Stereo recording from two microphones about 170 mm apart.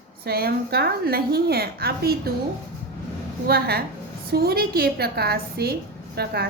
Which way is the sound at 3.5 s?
65° right (ahead or behind).